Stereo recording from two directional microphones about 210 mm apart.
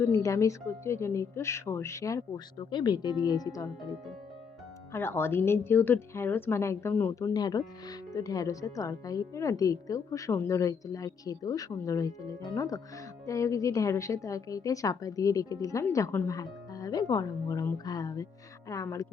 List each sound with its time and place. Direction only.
0.0 s a woman's voice: 15° left (ahead or behind)